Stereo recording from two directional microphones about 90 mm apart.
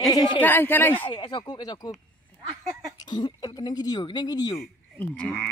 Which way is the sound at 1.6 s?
50° left (ahead or behind).